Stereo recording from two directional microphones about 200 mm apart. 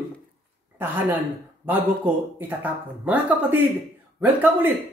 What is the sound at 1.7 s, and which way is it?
Speech, 10° right (ahead or behind).